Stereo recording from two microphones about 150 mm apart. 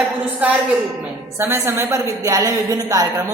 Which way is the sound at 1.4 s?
15° right (ahead or behind).